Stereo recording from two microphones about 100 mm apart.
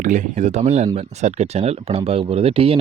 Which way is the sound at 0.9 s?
90° right.